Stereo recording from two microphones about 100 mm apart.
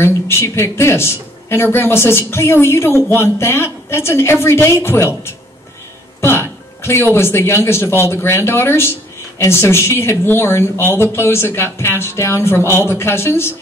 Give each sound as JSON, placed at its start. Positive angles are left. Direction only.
{"t": 0.0, "sound": "speech", "side_deg": 25}
{"t": 6.2, "sound": "a sound", "side_deg": 25}
{"t": 7.2, "sound": "speech", "side_deg": 25}